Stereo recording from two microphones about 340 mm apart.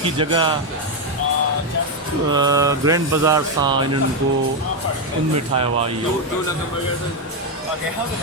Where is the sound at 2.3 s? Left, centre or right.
Centre.